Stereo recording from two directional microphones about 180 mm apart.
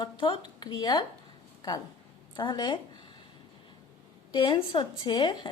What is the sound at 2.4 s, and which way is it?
Speech, 25° left (ahead or behind).